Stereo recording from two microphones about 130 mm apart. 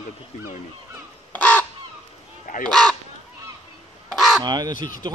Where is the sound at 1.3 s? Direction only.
10° left (ahead or behind).